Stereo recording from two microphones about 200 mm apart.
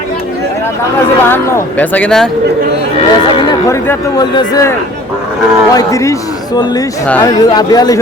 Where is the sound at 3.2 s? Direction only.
20° left (ahead or behind).